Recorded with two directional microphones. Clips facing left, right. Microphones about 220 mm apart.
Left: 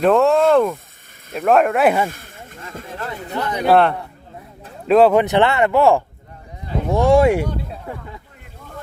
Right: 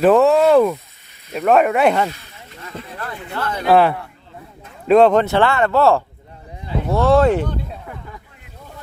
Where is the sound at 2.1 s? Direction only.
50° left (ahead or behind).